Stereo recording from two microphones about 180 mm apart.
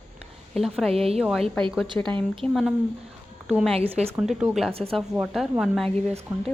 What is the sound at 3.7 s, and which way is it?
Speech, 35° right (ahead or behind).